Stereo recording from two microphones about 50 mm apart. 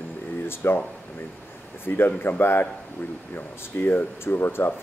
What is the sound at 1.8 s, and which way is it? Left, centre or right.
Speech, left.